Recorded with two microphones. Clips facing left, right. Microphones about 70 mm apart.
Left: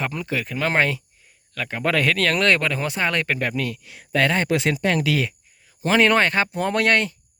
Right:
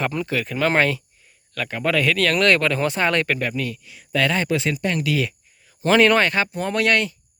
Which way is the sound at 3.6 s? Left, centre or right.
Left.